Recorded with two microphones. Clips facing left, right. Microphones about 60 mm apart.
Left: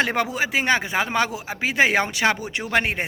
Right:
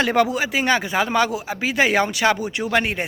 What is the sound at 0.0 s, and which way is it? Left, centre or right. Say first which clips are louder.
Speech: right 3 dB; left.